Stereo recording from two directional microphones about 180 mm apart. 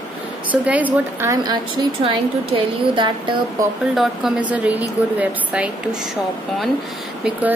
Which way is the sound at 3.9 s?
Centre (ahead or behind).